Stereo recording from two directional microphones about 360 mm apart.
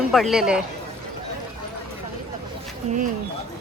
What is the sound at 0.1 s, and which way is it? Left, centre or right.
Speech, centre.